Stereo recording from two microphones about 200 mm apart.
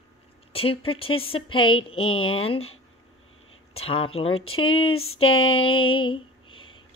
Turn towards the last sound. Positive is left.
turn(degrees=25)  # may be behind; listen again after turning